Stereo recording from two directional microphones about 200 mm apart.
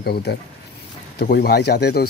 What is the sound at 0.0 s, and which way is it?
Speech, 50° left (ahead or behind).